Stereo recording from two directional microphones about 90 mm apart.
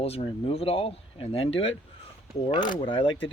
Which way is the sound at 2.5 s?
60° left (ahead or behind).